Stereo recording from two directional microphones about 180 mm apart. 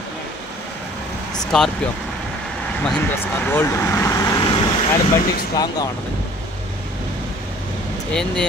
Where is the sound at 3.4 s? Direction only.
10° left (ahead or behind).